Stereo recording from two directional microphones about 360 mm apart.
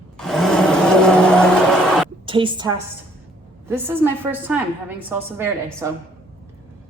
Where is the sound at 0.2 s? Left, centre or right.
Centre.